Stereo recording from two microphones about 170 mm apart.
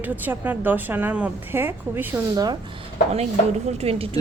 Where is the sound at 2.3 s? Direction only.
25° right (ahead or behind).